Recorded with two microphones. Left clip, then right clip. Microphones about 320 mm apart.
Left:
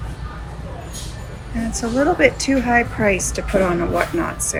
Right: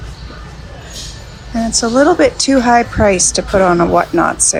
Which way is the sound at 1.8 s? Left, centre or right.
Centre.